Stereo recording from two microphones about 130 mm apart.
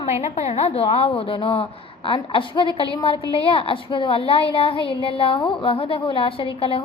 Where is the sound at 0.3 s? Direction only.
55° left (ahead or behind).